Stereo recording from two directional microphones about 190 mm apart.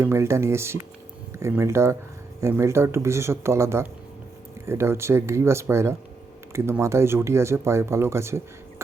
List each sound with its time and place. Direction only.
0.0 s speech: 15° right (ahead or behind)